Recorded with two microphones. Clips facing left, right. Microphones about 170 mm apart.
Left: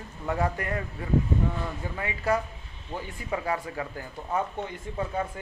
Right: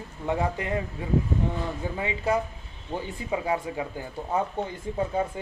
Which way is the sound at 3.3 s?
20° right (ahead or behind).